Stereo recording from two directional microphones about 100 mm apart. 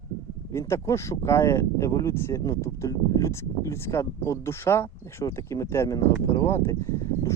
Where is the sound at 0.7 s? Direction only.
30° left (ahead or behind).